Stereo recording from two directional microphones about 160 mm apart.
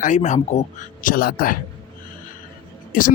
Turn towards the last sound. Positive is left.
turn(degrees=60)  # may be behind; listen again after turning